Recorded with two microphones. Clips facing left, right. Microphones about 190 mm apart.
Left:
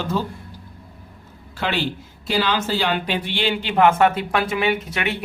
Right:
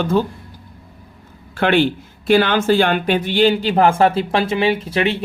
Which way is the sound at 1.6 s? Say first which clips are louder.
Right 9 dB; 60° right (ahead or behind).